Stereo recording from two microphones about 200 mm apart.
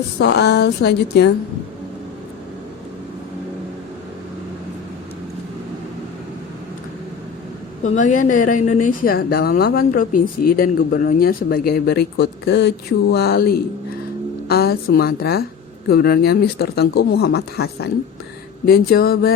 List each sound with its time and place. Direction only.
0.2 s a woman's voice: 55° left (ahead or behind)
7.9 s a woman's voice: 35° left (ahead or behind)